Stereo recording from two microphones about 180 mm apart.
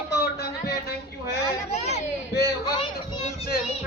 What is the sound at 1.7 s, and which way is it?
Hubbub, 35° left (ahead or behind).